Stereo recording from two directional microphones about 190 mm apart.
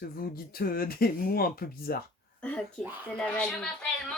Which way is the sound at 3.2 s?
5° left (ahead or behind).